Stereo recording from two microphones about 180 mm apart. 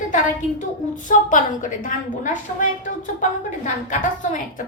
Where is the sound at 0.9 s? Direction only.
45° left (ahead or behind).